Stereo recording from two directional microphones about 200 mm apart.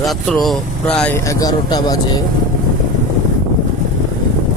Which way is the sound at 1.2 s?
15° left (ahead or behind).